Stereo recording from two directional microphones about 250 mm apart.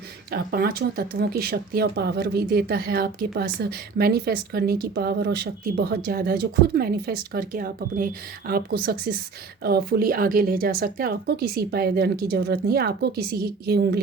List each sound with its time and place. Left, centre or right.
0.3 s a woman's voice: right